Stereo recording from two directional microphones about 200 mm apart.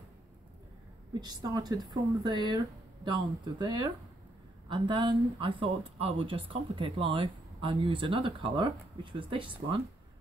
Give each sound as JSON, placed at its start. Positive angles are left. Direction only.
{"t": 1.2, "sound": "speech", "side_deg": -20}